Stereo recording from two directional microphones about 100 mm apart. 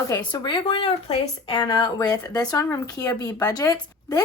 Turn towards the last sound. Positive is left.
turn(degrees=40)  # may be behind; listen again after turning